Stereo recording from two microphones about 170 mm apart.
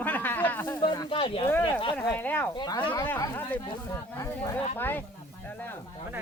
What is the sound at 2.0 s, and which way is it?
Speech, 10° left (ahead or behind).